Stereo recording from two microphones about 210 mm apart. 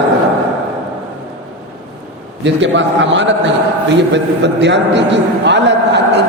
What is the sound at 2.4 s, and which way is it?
A man's voice, 60° right (ahead or behind).